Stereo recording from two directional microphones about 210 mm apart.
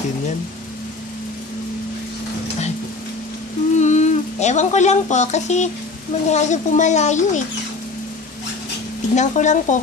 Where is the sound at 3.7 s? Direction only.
35° left (ahead or behind).